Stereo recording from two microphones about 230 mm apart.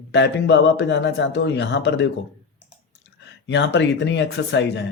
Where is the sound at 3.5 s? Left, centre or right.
Left.